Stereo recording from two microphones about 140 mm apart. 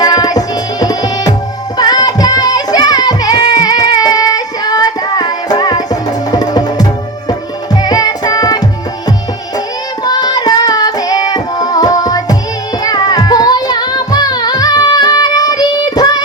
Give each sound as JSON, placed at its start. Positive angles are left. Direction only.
{"t": 0.0, "sound": "music", "side_deg": 30}
{"t": 7.3, "sound": "tabla", "side_deg": 30}
{"t": 10.0, "sound": "music", "side_deg": 30}